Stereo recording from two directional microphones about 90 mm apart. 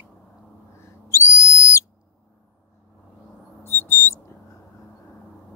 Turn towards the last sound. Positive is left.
turn(degrees=30)  # may be behind; listen again after turning